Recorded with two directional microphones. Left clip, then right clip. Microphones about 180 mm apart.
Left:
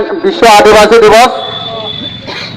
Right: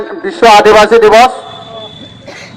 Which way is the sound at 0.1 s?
40° left (ahead or behind).